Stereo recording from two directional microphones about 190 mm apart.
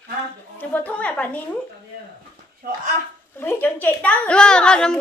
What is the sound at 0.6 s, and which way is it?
Speech, 10° left (ahead or behind).